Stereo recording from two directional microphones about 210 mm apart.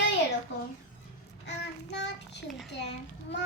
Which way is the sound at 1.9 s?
55° left (ahead or behind).